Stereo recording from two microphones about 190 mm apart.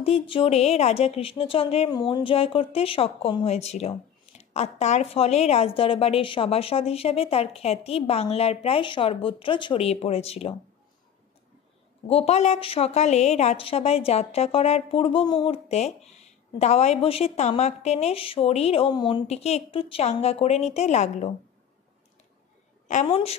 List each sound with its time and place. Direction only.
0.0 s speech: 30° left (ahead or behind)
12.1 s speech: 35° left (ahead or behind)
23.0 s a woman's voice: 30° left (ahead or behind)